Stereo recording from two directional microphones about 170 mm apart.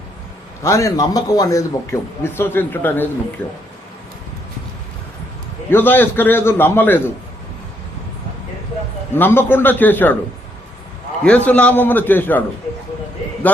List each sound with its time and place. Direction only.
0.6 s a man's voice: 20° left (ahead or behind)
5.7 s a man's voice: 10° left (ahead or behind)
9.1 s a man's voice: 10° left (ahead or behind)
11.2 s a man's voice: 5° left (ahead or behind)